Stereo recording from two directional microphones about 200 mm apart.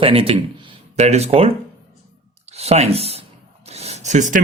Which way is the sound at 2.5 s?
30° right (ahead or behind).